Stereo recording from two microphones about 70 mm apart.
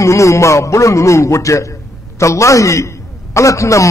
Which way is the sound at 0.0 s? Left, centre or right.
Left.